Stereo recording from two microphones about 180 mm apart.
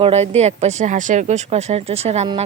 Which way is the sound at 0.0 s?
35° right (ahead or behind).